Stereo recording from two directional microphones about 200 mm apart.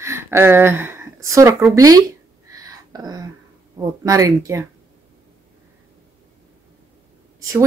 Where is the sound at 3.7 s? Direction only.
15° right (ahead or behind).